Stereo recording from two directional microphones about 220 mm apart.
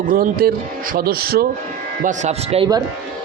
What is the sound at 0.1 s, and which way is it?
A man's voice, 40° right (ahead or behind).